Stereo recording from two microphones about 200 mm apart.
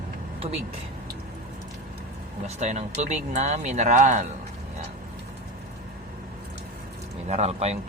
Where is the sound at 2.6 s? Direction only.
35° right (ahead or behind).